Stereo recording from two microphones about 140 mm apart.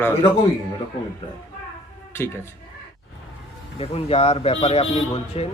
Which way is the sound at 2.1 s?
20° left (ahead or behind).